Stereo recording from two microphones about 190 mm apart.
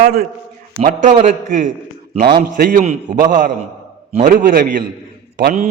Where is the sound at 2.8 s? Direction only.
35° right (ahead or behind).